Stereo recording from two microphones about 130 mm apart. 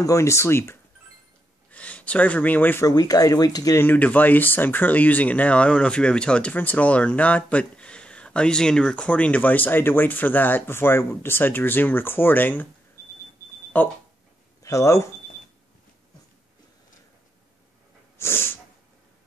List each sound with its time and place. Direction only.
0.0 s speech: 25° left (ahead or behind)
1.7 s speech: 10° left (ahead or behind)
2.9 s speech: 30° left (ahead or behind)
3.8 s speech: 15° left (ahead or behind)
13.7 s speech: 15° left (ahead or behind)
14.6 s speech: 25° left (ahead or behind)
18.1 s wheeze: 20° left (ahead or behind)